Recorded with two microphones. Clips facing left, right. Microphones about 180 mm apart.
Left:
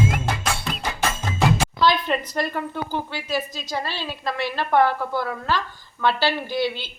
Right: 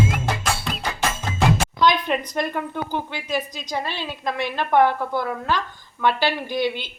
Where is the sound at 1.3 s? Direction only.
Centre (ahead or behind).